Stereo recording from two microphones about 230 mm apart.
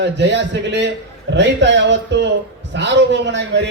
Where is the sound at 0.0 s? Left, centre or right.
Right.